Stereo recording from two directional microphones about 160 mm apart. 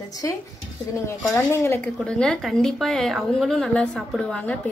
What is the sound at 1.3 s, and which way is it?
Dishes, 15° left (ahead or behind).